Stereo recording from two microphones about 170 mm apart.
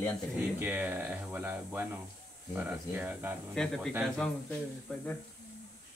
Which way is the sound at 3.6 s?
5° left (ahead or behind).